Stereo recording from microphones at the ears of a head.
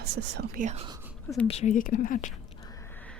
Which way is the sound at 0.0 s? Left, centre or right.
Right.